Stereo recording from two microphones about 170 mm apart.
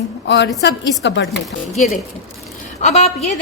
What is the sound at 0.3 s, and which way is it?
A woman's voice, 90° left.